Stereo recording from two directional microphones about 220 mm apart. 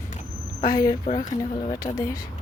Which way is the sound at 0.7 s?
15° left (ahead or behind).